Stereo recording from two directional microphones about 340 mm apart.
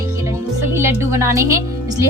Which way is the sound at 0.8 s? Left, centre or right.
Centre.